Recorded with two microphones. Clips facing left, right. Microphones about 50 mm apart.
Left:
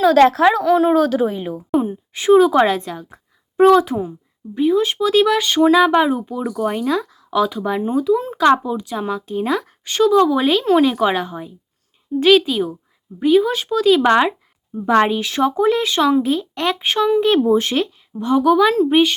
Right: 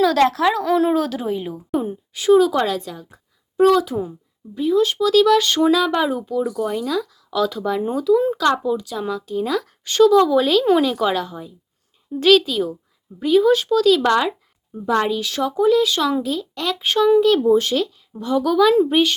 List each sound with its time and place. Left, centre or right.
0.2 s speech: left
1.7 s a sound: centre
2.1 s speech: left
5.4 s speech: centre
5.7 s speech: left
6.4 s speech: left
9.6 s speech: centre; by 11.5 s left
12.2 s speech: centre
14.9 s speech: left; by 19.1 s centre